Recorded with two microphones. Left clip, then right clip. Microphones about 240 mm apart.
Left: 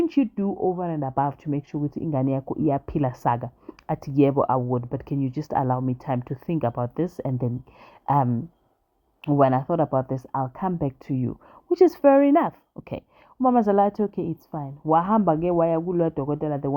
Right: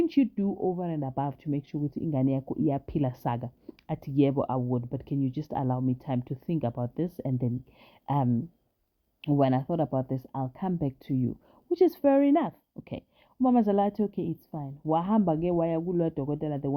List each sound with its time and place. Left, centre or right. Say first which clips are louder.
0.0 s speech: left 3 dB; centre
0.5 s speech: left 8 dB; left
0.8 s speech: left 7 dB; left
9.4 s speech: left 7 dB; centre